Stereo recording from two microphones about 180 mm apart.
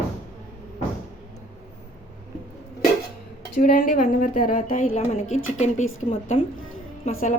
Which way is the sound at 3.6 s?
50° left (ahead or behind).